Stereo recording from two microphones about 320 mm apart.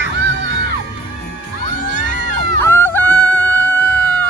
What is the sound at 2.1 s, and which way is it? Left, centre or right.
Crowd, right.